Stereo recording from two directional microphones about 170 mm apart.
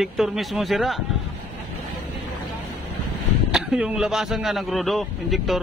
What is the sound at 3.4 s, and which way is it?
A man's voice, 5° right (ahead or behind).